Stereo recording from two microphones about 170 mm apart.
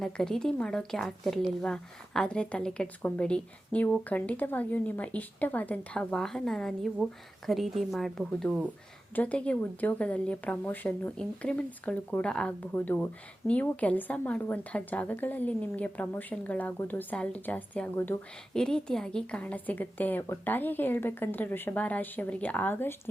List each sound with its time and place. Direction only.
0.0 s a woman's voice: 5° left (ahead or behind)